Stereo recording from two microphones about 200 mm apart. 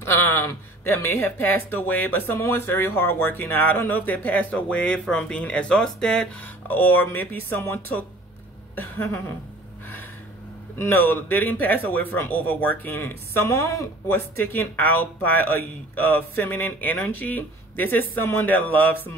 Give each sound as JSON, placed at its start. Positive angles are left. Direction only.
{"t": 0.0, "sound": "speech", "side_deg": 10}
{"t": 8.7, "sound": "a sound", "side_deg": 10}
{"t": 10.8, "sound": "speech", "side_deg": 10}